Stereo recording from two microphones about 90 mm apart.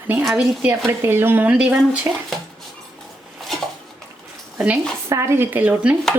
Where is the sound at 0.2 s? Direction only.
5° right (ahead or behind).